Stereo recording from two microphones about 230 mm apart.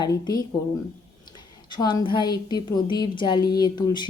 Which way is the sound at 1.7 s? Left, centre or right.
Centre.